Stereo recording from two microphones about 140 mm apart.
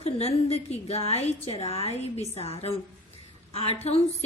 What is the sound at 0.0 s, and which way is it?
A woman's voice, 45° left (ahead or behind).